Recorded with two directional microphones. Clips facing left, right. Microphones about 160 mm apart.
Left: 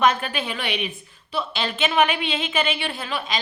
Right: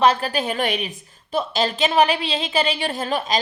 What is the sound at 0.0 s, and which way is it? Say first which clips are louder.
A woman's voice: right 3 dB; 35° right (ahead or behind).